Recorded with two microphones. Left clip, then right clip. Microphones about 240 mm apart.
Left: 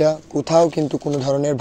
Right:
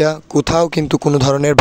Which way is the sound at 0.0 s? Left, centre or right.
Right.